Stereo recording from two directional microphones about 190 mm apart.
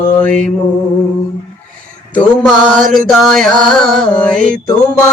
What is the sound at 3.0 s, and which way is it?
Music, centre (ahead or behind).